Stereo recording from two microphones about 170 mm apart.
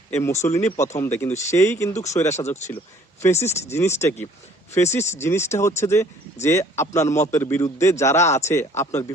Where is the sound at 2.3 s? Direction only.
40° left (ahead or behind).